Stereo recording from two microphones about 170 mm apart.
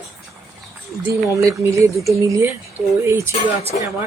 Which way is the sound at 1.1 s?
20° right (ahead or behind).